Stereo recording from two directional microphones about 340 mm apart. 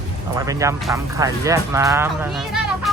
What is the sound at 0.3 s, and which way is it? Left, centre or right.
Speech, centre.